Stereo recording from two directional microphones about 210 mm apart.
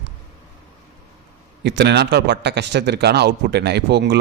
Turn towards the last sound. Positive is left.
turn(degrees=-55)  # may be behind; listen again after turning